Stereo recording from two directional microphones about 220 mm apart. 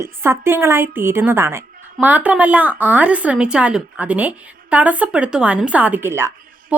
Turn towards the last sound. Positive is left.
turn(degrees=-10)  # may be behind; listen again after turning